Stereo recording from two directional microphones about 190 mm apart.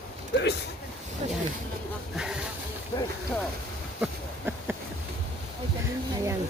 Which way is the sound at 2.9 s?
25° left (ahead or behind).